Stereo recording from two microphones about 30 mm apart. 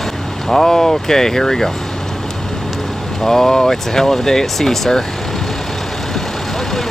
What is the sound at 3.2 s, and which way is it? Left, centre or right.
Speech, centre.